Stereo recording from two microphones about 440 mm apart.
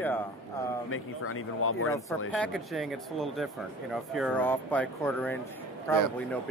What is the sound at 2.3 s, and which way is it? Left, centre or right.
Speech, centre.